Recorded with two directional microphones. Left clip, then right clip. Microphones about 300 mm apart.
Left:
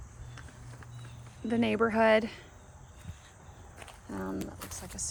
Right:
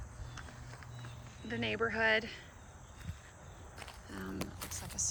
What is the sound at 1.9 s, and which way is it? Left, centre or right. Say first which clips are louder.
Speech: left 7 dB; centre.